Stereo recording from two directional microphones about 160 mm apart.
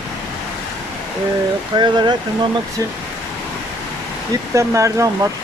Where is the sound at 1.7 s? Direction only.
30° right (ahead or behind).